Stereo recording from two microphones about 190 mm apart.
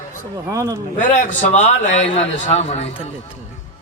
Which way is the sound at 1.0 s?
40° left (ahead or behind).